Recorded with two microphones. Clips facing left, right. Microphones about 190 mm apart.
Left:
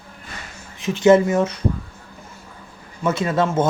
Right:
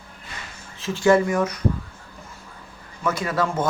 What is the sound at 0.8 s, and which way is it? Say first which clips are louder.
Speech: left 4 dB; 20° left (ahead or behind).